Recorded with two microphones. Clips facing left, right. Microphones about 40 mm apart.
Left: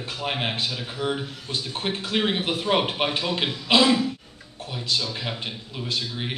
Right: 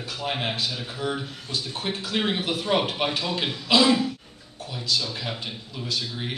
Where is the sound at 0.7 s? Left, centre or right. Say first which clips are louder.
Left 2 dB; left.